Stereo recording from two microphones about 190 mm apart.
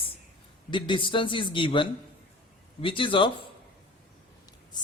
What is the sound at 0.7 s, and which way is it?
Speech, 25° left (ahead or behind).